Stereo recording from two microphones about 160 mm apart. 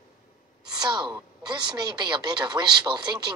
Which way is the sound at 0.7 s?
25° right (ahead or behind).